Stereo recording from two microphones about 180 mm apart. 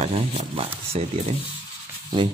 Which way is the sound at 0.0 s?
35° right (ahead or behind).